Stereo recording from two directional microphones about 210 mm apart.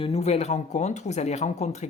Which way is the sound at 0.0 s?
30° left (ahead or behind).